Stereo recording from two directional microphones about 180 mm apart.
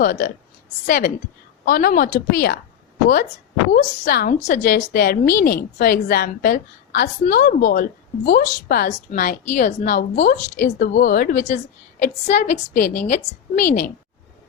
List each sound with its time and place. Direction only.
0.0 s a woman's voice: 55° left (ahead or behind)
3.7 s a woman's voice: 45° left (ahead or behind)